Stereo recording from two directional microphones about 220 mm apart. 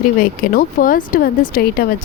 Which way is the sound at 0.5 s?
40° left (ahead or behind).